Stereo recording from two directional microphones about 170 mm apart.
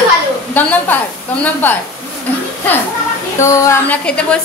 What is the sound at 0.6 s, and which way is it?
Speech, 10° left (ahead or behind).